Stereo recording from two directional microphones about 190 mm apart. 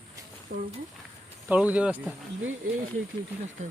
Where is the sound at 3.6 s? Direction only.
35° right (ahead or behind).